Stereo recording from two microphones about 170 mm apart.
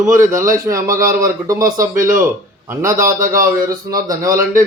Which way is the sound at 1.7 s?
55° right (ahead or behind).